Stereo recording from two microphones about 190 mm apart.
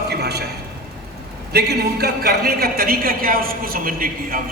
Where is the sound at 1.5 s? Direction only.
60° right (ahead or behind).